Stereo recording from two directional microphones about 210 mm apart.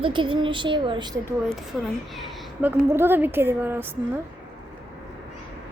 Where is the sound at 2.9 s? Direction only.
10° right (ahead or behind).